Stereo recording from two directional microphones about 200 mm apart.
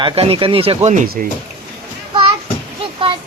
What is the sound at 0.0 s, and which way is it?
Speech, 25° right (ahead or behind).